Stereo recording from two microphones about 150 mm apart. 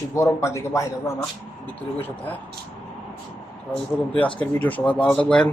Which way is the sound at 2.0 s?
10° left (ahead or behind).